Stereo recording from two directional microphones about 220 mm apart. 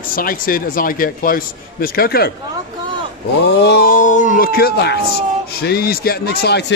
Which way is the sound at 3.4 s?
50° left (ahead or behind).